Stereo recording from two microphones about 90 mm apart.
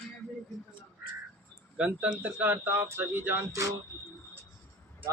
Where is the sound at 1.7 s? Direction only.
10° right (ahead or behind).